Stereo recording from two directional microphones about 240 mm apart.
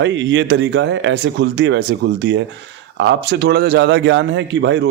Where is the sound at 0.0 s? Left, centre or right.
Right.